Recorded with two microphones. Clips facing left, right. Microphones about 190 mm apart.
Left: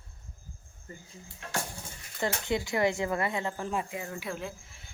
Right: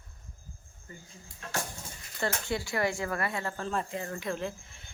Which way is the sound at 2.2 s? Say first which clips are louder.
Left 2 dB; 20° left (ahead or behind).